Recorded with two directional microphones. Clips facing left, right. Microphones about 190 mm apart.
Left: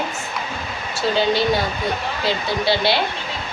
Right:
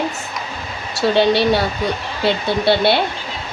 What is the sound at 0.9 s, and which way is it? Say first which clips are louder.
Speech: right 4 dB; 70° right (ahead or behind).